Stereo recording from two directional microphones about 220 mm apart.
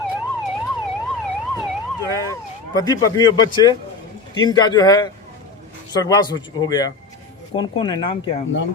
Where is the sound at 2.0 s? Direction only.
15° left (ahead or behind).